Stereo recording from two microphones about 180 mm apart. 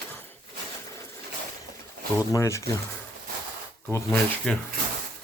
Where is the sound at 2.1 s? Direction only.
15° left (ahead or behind).